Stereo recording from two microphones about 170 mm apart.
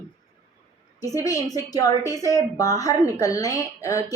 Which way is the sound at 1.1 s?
20° left (ahead or behind).